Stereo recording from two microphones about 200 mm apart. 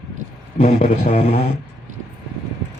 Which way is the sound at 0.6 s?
35° left (ahead or behind).